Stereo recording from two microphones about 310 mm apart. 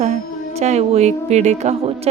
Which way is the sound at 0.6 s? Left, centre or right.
Right.